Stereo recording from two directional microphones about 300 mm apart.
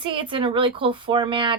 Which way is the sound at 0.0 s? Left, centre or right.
Centre.